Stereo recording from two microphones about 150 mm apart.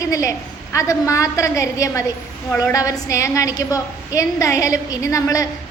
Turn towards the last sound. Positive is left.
turn(degrees=20)  # may be behind; listen again after turning